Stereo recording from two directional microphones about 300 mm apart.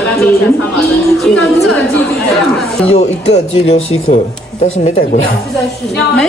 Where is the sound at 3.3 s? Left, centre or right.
Centre.